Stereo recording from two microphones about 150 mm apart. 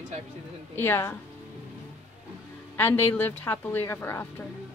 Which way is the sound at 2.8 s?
15° left (ahead or behind).